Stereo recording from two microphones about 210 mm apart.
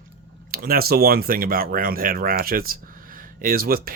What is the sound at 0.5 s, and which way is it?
Speech, 45° right (ahead or behind).